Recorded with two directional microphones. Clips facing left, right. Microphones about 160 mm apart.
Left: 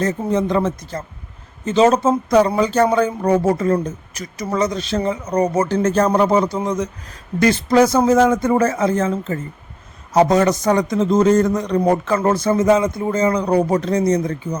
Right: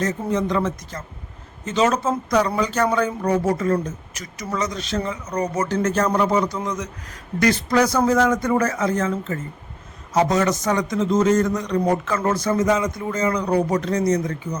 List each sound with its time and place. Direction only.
0.0 s a man's voice: 30° left (ahead or behind)